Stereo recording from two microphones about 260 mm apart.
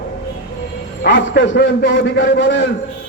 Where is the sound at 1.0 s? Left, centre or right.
Left.